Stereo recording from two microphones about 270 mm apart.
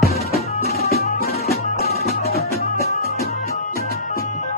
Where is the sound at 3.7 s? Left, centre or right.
Left.